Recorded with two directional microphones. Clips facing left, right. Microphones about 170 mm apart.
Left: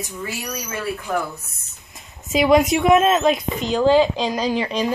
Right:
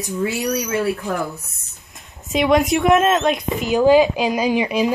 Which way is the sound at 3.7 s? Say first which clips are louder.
Right 2 dB; 10° right (ahead or behind).